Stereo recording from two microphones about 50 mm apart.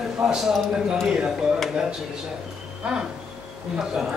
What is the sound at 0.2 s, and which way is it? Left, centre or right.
Speech, centre.